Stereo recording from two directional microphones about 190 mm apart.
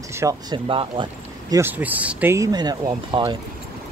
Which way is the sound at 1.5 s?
10° right (ahead or behind).